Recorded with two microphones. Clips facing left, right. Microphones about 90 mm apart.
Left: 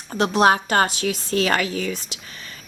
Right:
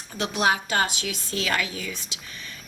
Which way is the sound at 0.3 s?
45° left (ahead or behind).